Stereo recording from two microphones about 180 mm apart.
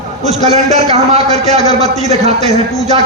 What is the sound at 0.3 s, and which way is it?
A man's voice, 35° right (ahead or behind).